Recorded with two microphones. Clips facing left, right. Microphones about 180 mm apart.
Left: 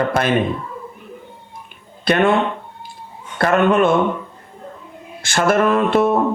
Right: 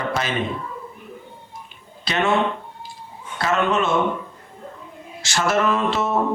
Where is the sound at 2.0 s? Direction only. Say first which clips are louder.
Left 6 dB; 55° left (ahead or behind).